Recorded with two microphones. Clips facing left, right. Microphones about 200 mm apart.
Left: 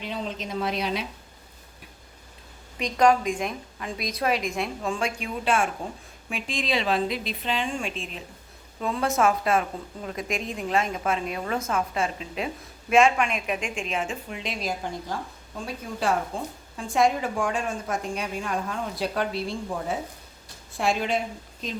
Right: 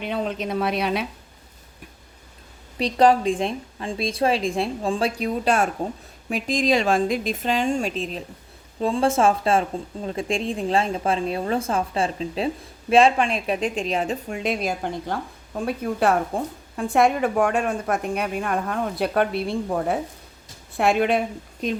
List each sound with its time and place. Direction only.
0.0 s a woman's voice: 60° right (ahead or behind)
2.7 s a woman's voice: 35° right (ahead or behind); by 21.2 s 60° right (ahead or behind)